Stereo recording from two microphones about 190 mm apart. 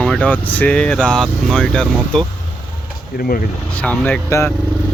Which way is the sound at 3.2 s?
45° left (ahead or behind).